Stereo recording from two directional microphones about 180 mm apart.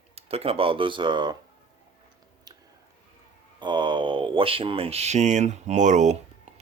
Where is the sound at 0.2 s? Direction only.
35° right (ahead or behind).